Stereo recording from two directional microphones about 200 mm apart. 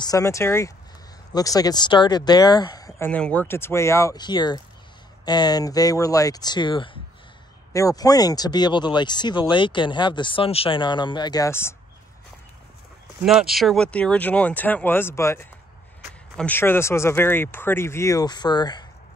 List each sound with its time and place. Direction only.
0.0 s speech: 15° left (ahead or behind)
3.1 s speech: 5° left (ahead or behind)
13.2 s speech: 5° right (ahead or behind); by 18.9 s 20° left (ahead or behind)